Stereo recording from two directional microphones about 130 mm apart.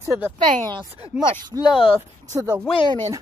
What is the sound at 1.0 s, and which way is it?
Speech, 25° left (ahead or behind).